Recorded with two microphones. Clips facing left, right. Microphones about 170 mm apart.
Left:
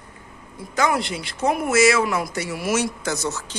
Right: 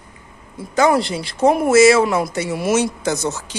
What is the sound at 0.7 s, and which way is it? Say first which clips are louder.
Speech: right 6 dB; 30° right (ahead or behind).